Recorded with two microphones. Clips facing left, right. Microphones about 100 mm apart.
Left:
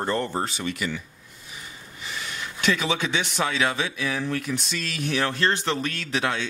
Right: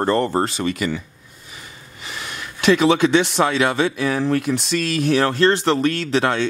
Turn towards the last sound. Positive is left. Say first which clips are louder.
# right 7 dB
turn(degrees=-65)  # may be behind; listen again after turning